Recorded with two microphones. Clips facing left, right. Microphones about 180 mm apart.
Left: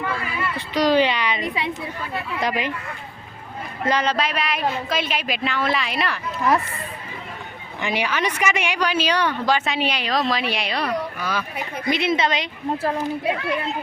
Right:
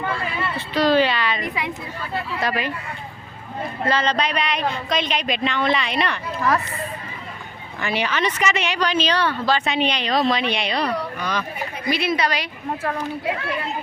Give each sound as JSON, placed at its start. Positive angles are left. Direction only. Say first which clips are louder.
{"t": 0.5, "sound": "a woman's voice", "louder": "even", "side_deg": 15}
{"t": 3.8, "sound": "a woman's voice", "louder": "even", "side_deg": 10}
{"t": 7.8, "sound": "a woman's voice", "louder": "right 1 dB", "side_deg": 15}
{"t": 11.9, "sound": "a woman's voice", "louder": "left 1 dB", "side_deg": 20}